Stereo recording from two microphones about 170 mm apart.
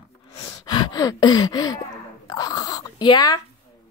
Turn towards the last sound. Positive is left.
turn(degrees=25)  # may be behind; listen again after turning